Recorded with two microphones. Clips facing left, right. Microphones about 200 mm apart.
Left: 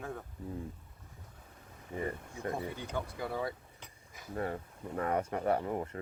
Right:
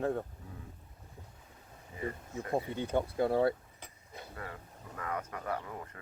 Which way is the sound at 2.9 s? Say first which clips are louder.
Right 9 dB; 30° right (ahead or behind).